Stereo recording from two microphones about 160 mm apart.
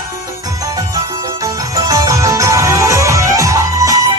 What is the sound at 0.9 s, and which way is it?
Music, 20° right (ahead or behind).